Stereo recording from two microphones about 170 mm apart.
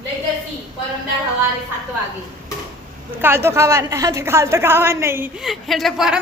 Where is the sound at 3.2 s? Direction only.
15° right (ahead or behind).